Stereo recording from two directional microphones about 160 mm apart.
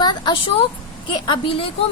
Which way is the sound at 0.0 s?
25° left (ahead or behind).